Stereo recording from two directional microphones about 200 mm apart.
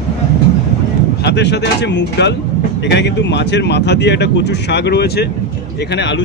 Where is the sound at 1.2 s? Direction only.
60° left (ahead or behind).